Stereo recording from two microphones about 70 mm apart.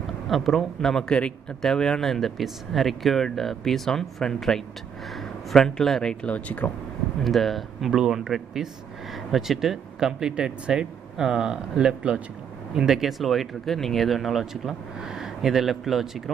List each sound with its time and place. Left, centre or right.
0.0 s speech: centre
6.2 s speech: left
7.2 s speech: centre